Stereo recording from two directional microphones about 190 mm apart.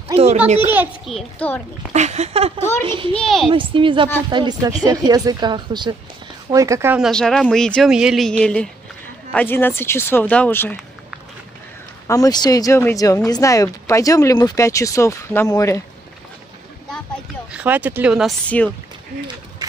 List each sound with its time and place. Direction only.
0.1 s a child's voice: 30° right (ahead or behind)
0.7 s speech: 5° right (ahead or behind)
1.9 s speech: 35° right (ahead or behind)
3.2 s speech: centre (ahead or behind)
3.4 s speech: 25° right (ahead or behind); by 7.1 s 10° right (ahead or behind)
7.1 s speech: 5° left (ahead or behind)
12.1 s speech: 20° left (ahead or behind)
17.5 s speech: 5° right (ahead or behind)
18.5 s speech: 5° left (ahead or behind)